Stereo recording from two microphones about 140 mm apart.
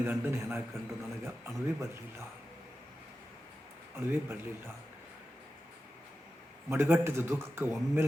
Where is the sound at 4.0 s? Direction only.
15° right (ahead or behind).